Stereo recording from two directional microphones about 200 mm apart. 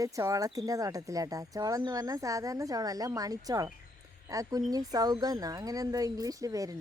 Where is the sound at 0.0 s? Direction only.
15° right (ahead or behind).